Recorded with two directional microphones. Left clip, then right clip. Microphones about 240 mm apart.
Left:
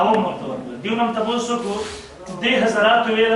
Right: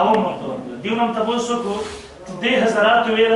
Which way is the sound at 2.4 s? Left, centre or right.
Centre.